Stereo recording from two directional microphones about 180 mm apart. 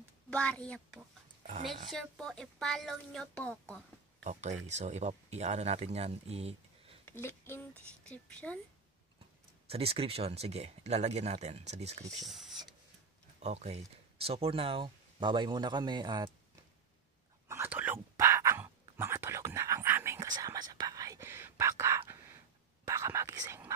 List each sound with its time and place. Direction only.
0.3 s speech: 5° left (ahead or behind)
4.2 s speech: 40° right (ahead or behind)
7.1 s speech: 15° left (ahead or behind)
9.7 s speech: 35° right (ahead or behind)
12.3 s a sound: centre (ahead or behind)
13.4 s speech: 35° right (ahead or behind)
17.5 s whispering: 10° right (ahead or behind)